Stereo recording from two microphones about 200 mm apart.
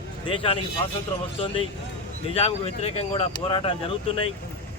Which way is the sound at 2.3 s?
30° left (ahead or behind).